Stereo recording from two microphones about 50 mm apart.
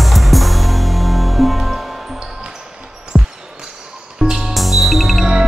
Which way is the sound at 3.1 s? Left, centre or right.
Centre.